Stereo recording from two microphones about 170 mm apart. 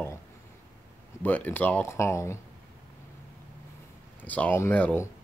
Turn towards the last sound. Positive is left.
turn(degrees=10)  # may be behind; listen again after turning